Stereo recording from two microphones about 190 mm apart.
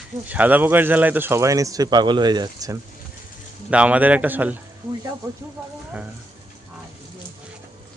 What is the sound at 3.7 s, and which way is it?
Speech, 5° right (ahead or behind).